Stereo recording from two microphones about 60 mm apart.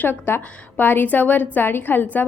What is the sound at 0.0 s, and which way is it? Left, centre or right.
A woman's voice, left.